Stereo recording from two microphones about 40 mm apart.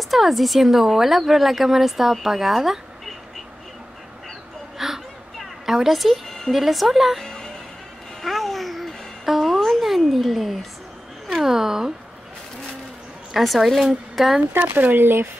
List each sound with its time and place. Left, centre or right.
0.1 s speech: centre
4.7 s a sound: centre
5.9 s speech: centre
6.5 s speech: centre
8.2 s babbling: centre
9.7 s a sound: centre
11.4 s speech: centre
13.3 s a woman's voice: centre
14.7 s speech: right